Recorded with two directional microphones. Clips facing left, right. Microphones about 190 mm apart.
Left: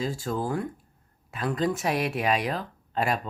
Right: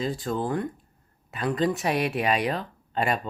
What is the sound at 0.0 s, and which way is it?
Speech, centre (ahead or behind).